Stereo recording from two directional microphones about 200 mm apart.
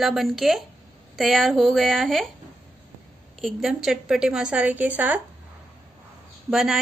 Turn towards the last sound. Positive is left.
turn(degrees=0)  # may be behind; listen again after turning